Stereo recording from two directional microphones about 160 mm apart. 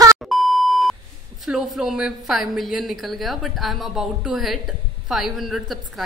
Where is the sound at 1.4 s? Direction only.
Centre (ahead or behind).